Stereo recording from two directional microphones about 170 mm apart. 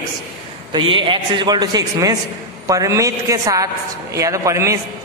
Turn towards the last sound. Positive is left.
turn(degrees=-15)  # may be behind; listen again after turning